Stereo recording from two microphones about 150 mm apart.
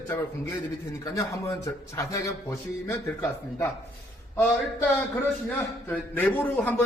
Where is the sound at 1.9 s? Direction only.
20° left (ahead or behind).